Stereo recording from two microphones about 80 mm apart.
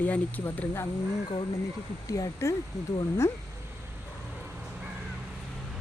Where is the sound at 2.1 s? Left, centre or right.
Left.